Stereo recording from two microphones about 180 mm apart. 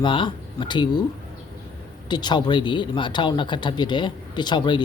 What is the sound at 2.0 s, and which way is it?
Speech, 25° left (ahead or behind).